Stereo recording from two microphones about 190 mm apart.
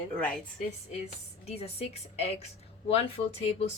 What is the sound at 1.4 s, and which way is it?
A woman's voice, 30° left (ahead or behind).